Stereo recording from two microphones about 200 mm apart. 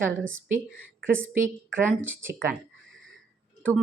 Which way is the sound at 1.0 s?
10° right (ahead or behind).